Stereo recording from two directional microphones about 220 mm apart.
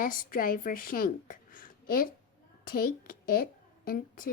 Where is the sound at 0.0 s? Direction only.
40° left (ahead or behind).